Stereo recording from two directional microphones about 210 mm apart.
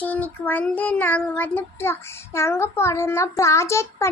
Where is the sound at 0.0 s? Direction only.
10° left (ahead or behind).